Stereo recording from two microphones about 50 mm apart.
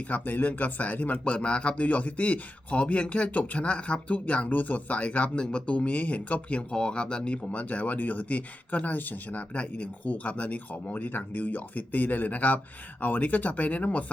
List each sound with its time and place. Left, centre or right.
0.1 s speech: left
9.6 s speech: left